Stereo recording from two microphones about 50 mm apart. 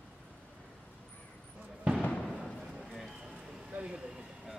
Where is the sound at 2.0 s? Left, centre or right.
Left.